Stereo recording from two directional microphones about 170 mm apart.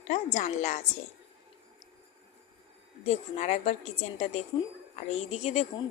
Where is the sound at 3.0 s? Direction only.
40° left (ahead or behind).